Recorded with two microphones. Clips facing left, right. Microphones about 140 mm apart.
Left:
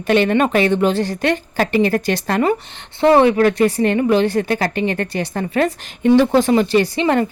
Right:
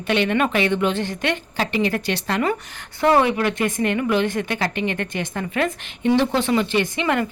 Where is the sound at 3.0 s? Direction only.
30° left (ahead or behind).